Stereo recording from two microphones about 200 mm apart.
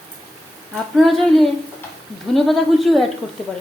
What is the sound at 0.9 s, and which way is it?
A woman's voice, centre (ahead or behind).